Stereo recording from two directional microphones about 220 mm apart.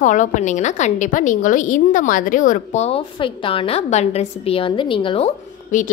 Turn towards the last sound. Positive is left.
turn(degrees=30)  # may be behind; listen again after turning